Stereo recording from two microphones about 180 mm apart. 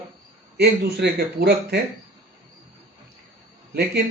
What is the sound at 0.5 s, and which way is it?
Speech, 65° right (ahead or behind).